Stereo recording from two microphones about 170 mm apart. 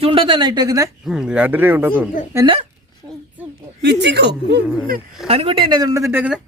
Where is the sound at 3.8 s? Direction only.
85° right.